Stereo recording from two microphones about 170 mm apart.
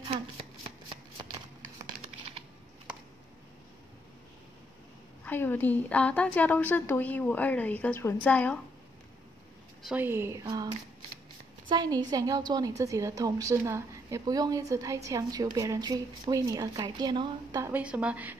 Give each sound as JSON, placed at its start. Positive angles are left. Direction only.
{"t": 5.2, "sound": "a woman's voice", "side_deg": 10}
{"t": 9.8, "sound": "a woman's voice", "side_deg": -10}
{"t": 11.7, "sound": "a woman's voice", "side_deg": -25}